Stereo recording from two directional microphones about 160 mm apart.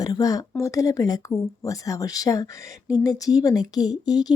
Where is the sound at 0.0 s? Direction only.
25° left (ahead or behind).